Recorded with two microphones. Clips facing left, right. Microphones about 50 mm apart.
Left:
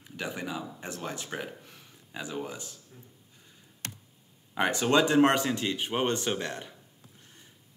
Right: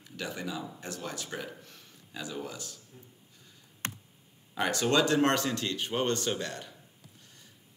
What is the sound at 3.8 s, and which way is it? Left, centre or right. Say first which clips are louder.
Computer keyboard: right 4 dB; right.